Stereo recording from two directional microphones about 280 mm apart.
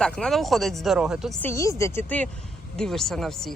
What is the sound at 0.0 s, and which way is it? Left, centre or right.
Speech, centre.